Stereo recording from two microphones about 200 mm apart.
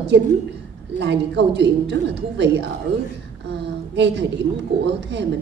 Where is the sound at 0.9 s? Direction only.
60° right (ahead or behind).